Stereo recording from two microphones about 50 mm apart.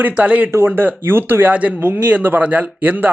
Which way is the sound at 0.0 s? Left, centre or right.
Right.